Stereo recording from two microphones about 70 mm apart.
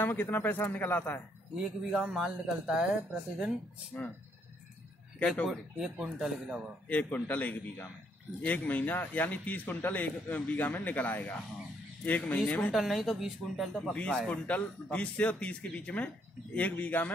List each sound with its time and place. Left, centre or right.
0.0 s a man's voice: left
1.6 s speech: centre
3.9 s speech: centre
5.5 s speech: centre
6.9 s a man's voice: left
12.4 s a man's voice: left
12.7 s speech: centre
13.9 s a man's voice: centre